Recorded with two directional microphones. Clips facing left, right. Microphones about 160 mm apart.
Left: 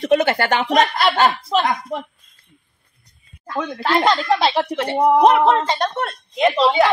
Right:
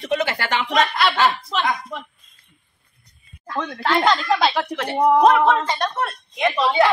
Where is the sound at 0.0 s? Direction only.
50° left (ahead or behind).